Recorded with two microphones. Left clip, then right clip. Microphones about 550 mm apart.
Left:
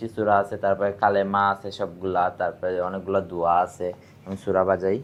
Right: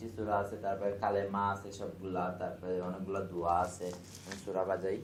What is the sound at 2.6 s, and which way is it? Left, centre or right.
Speech, left.